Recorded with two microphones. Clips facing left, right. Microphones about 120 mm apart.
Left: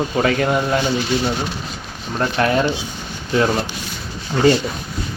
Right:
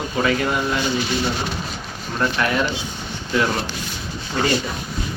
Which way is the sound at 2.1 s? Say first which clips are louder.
Left 3 dB; 35° left (ahead or behind).